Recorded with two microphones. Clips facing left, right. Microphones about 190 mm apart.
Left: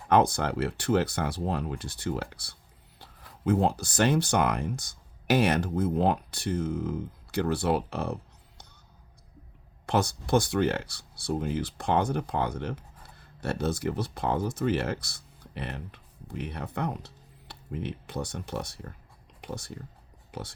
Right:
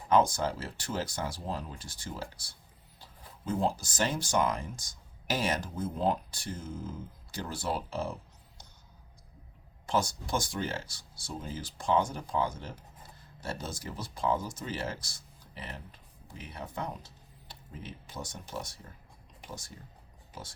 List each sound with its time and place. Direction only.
0.1 s speech: 65° left (ahead or behind)
9.8 s speech: 65° left (ahead or behind)